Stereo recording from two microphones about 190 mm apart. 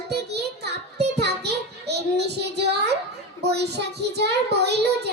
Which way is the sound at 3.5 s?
60° right (ahead or behind).